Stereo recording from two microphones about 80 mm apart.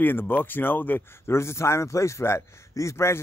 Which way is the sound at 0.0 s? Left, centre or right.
Left.